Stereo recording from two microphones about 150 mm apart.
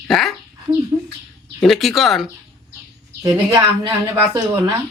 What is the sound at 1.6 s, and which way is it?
Speech, centre (ahead or behind).